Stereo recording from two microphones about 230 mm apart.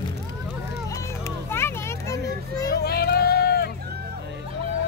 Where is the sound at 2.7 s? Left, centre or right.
Left.